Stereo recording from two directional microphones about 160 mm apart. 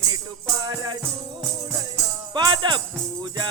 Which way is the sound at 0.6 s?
25° right (ahead or behind).